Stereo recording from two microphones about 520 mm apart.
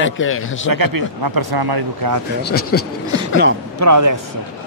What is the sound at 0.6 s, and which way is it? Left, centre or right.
Speech, right.